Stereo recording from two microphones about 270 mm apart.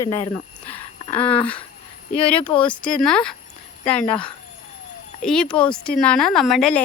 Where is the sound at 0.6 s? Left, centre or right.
Centre.